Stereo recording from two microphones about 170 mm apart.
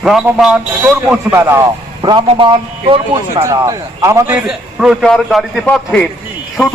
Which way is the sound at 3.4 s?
20° right (ahead or behind).